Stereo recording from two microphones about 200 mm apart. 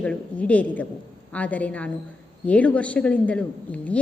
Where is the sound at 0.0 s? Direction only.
5° left (ahead or behind).